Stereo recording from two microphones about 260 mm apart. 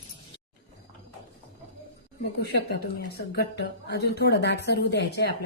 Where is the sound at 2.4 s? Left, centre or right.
Left.